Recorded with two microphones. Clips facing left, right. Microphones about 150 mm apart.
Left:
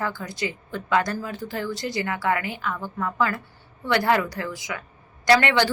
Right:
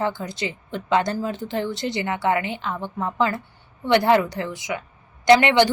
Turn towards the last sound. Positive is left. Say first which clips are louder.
# right 4 dB
turn(degrees=-20)  # may be behind; listen again after turning